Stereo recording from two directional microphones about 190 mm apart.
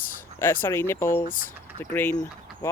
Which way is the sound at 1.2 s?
45° left (ahead or behind).